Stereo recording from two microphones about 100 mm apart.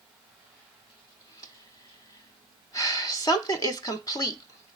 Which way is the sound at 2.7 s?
35° left (ahead or behind).